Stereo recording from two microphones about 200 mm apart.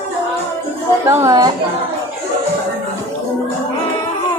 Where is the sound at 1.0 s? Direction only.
15° right (ahead or behind).